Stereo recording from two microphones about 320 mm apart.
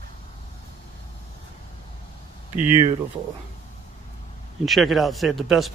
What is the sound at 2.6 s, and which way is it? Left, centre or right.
Speech, centre.